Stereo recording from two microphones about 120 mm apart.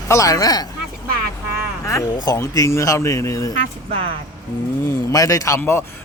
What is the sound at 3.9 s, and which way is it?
Speech, 55° right (ahead or behind).